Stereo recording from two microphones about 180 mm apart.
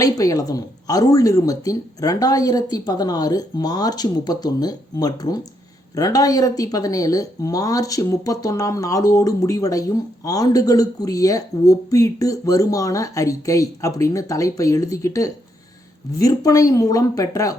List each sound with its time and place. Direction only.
0.0 s speech: 20° left (ahead or behind)